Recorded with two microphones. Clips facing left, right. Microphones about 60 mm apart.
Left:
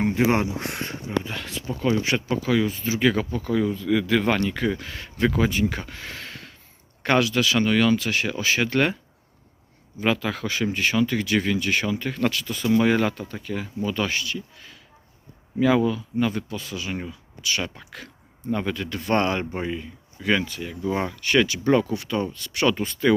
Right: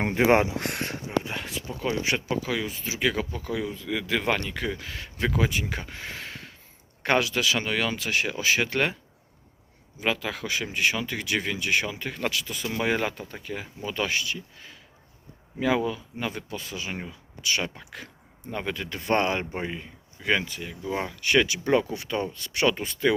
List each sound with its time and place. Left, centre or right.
0.0 s speech: right
1.2 s speech: centre
2.0 s speech: centre
10.0 s speech: centre
20.6 s speech: centre
20.9 s speech: centre
21.2 s speech: centre